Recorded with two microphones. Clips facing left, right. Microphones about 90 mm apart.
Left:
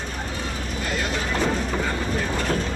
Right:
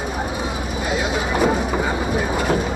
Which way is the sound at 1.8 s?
10° right (ahead or behind).